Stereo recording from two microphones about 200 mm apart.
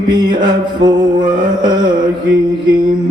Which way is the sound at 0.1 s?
20° right (ahead or behind).